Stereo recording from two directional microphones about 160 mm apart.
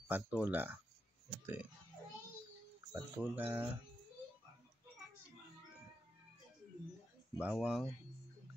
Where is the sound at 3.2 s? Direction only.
10° right (ahead or behind).